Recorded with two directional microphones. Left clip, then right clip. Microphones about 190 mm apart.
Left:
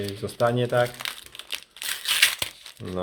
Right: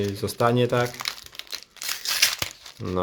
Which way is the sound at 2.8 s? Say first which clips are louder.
Right 5 dB; 30° right (ahead or behind).